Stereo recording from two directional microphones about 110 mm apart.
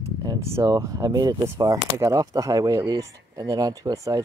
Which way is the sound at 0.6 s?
30° right (ahead or behind).